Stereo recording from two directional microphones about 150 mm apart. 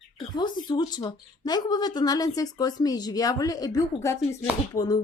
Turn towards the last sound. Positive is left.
turn(degrees=25)  # may be behind; listen again after turning